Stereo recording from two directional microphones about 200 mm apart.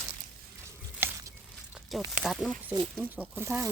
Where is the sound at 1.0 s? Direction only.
10° right (ahead or behind).